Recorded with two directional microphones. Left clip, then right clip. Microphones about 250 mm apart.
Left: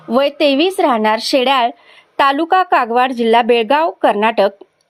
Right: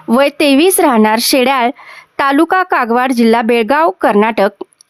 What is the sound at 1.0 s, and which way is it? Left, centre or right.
Speech, right.